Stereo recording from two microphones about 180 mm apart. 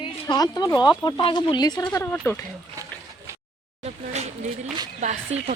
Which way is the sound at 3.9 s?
35° right (ahead or behind).